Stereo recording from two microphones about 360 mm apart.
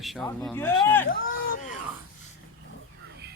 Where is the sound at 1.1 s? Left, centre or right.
Left.